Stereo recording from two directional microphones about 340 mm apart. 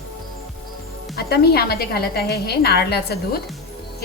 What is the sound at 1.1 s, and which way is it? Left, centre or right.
A woman's voice, left.